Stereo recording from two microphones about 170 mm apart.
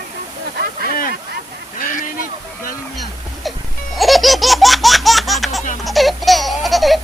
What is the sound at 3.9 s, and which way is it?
Baby laughter, centre (ahead or behind).